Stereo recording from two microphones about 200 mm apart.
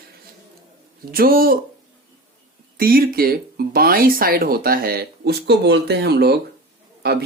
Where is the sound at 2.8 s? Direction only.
50° right (ahead or behind).